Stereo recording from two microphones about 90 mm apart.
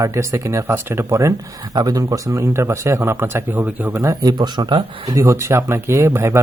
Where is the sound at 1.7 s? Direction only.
45° right (ahead or behind); by 4.0 s 20° right (ahead or behind).